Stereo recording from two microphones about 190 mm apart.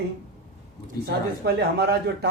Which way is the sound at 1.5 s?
60° right (ahead or behind).